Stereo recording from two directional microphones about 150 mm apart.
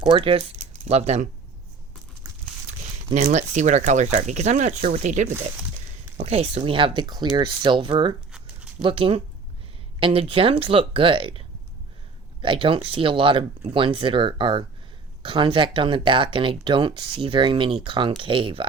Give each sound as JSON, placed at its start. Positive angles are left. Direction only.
{"t": 0.1, "sound": "speech", "side_deg": -40}
{"t": 3.2, "sound": "speech", "side_deg": -50}